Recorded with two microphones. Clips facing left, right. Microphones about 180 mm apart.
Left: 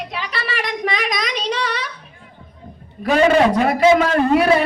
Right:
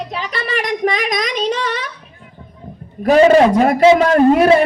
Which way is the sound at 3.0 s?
45° right (ahead or behind).